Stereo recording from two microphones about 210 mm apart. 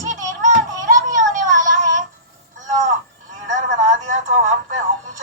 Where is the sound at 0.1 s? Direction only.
35° right (ahead or behind).